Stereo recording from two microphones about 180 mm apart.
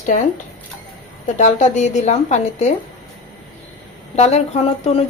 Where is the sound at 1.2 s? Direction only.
40° left (ahead or behind).